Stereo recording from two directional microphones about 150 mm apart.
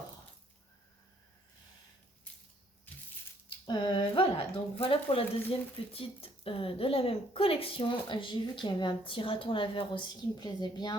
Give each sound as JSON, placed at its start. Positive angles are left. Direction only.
{"t": 3.7, "sound": "a woman's voice", "side_deg": 30}